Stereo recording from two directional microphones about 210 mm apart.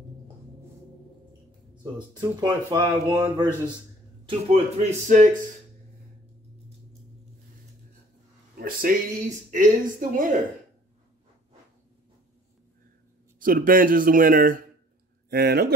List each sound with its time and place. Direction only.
2.1 s speech: 20° right (ahead or behind)
4.3 s speech: 35° right (ahead or behind)
8.5 s a sound: 45° right (ahead or behind)
9.5 s speech: 40° right (ahead or behind)
13.4 s speech: 40° right (ahead or behind)